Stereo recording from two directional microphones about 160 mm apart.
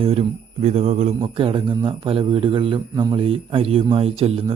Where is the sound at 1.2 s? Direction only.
30° right (ahead or behind).